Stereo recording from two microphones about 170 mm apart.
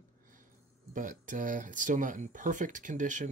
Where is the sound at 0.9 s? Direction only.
50° right (ahead or behind).